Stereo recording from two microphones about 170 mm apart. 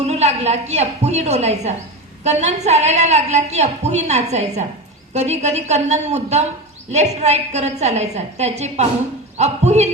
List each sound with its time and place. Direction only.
0.0 s a woman's voice: 40° right (ahead or behind)